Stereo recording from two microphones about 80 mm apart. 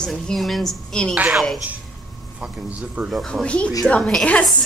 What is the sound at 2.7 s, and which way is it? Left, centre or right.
Speech, centre.